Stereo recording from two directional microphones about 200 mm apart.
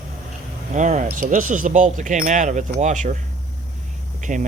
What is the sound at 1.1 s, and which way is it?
Speech, 40° right (ahead or behind).